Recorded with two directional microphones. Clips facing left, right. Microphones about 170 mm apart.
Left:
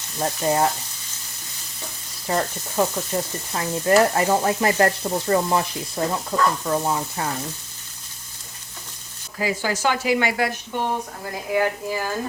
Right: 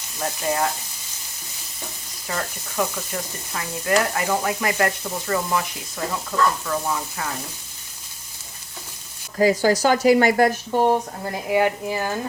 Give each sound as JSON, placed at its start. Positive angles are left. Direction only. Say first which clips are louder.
{"t": 2.2, "sound": "stir", "louder": "left 5 dB", "side_deg": 30}
{"t": 3.1, "sound": "speech", "louder": "left 6 dB", "side_deg": 30}
{"t": 3.5, "sound": "stir", "louder": "left 4 dB", "side_deg": 35}
{"t": 6.7, "sound": "speech", "louder": "left 3 dB", "side_deg": 30}
{"t": 9.4, "sound": "speech", "louder": "right 6 dB", "side_deg": -40}
{"t": 11.4, "sound": "speech", "louder": "right 2 dB", "side_deg": -20}